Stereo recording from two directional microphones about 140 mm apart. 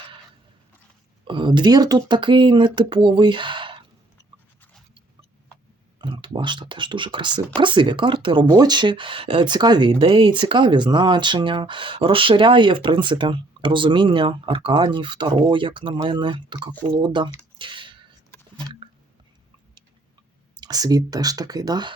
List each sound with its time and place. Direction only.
1.3 s speech: 35° right (ahead or behind)
6.0 s speech: 35° right (ahead or behind)
17.6 s a sound: 35° right (ahead or behind)
20.6 s speech: 25° right (ahead or behind)